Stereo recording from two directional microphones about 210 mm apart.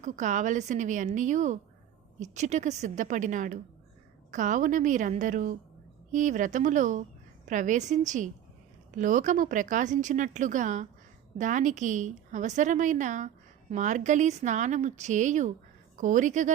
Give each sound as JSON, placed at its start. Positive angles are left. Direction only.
{"t": 0.0, "sound": "a woman's voice", "side_deg": -35}